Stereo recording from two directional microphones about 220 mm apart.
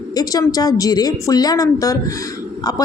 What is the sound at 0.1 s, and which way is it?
Speech, 15° left (ahead or behind).